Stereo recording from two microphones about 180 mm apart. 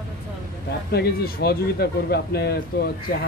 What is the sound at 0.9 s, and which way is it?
Speech, 60° left (ahead or behind).